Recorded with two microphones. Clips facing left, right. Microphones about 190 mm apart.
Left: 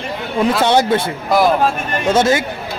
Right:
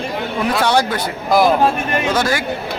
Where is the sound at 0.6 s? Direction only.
25° left (ahead or behind).